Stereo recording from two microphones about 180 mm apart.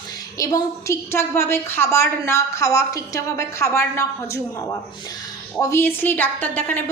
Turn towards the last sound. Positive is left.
turn(degrees=10)  # may be behind; listen again after turning